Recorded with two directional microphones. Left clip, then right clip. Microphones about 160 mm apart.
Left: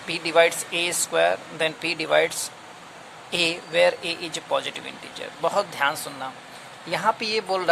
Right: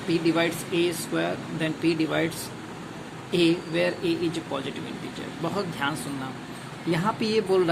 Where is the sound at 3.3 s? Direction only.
55° left (ahead or behind).